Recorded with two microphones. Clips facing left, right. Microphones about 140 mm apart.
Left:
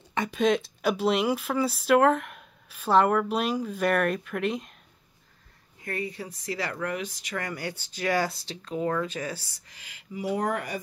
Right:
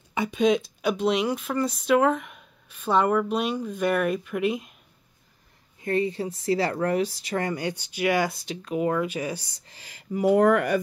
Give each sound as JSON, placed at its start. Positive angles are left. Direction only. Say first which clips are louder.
{"t": 0.1, "sound": "speech", "louder": "right 2 dB", "side_deg": 0}
{"t": 5.8, "sound": "speech", "louder": "right 8 dB", "side_deg": -25}
{"t": 9.7, "sound": "speech", "louder": "right 9 dB", "side_deg": -35}